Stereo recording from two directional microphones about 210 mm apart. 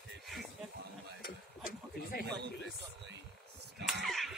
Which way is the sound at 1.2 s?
45° left (ahead or behind).